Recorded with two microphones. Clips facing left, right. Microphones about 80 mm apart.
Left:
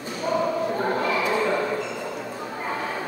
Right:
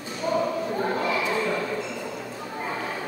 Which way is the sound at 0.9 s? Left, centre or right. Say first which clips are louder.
Left 2 dB; centre.